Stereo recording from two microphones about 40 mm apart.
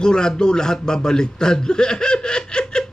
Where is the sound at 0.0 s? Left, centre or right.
Centre.